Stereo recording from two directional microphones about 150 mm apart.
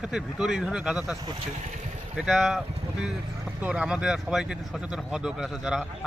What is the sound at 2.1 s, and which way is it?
Speech, centre (ahead or behind).